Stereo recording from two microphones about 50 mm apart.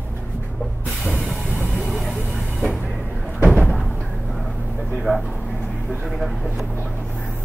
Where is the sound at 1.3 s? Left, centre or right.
Centre.